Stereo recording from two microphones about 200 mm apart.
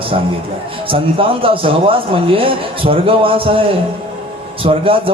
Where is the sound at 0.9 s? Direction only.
25° right (ahead or behind).